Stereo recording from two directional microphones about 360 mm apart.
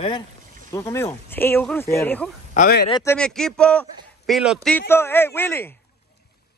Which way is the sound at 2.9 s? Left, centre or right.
Centre.